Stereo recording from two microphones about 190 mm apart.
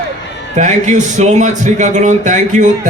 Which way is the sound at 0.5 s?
40° right (ahead or behind).